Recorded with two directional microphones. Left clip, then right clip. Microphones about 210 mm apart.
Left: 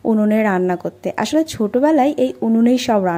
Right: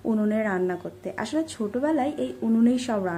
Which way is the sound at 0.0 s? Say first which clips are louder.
Left 9 dB; 30° left (ahead or behind).